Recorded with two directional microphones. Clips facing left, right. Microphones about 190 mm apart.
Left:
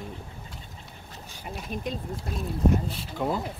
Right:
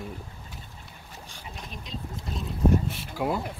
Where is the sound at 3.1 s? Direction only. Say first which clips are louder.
Even; 5° right (ahead or behind).